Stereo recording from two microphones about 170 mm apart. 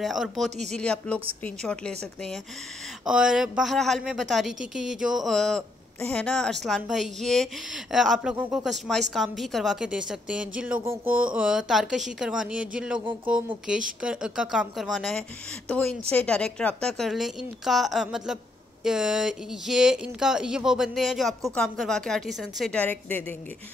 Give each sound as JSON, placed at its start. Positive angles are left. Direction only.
{"t": 0.0, "sound": "a woman's voice", "side_deg": 0}
{"t": 3.1, "sound": "a woman's voice", "side_deg": -5}